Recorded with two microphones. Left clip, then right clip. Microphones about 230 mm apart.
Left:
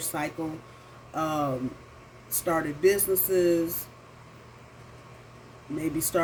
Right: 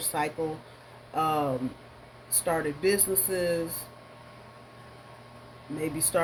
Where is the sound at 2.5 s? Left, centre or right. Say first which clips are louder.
Left 2 dB; right.